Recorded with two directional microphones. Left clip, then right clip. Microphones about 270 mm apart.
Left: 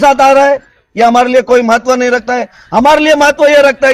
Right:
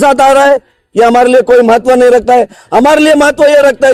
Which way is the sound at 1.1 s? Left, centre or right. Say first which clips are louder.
Right 2 dB; right.